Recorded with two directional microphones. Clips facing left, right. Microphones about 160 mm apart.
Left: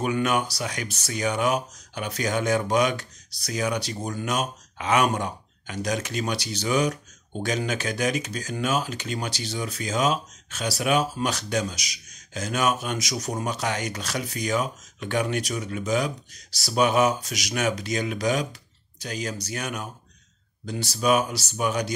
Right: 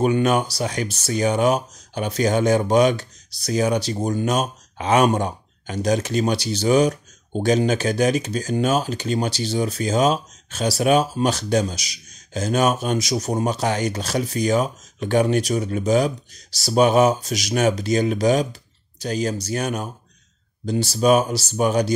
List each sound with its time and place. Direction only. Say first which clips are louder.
0.0 s speech: right 6 dB; 30° right (ahead or behind)